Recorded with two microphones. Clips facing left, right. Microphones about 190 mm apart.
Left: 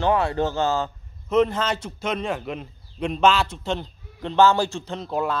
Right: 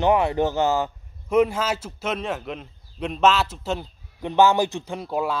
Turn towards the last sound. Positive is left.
turn(degrees=-10)  # may be behind; listen again after turning